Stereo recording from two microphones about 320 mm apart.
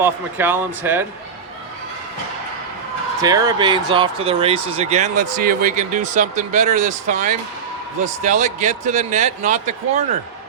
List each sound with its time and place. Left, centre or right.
0.0 s speech: centre
3.2 s speech: centre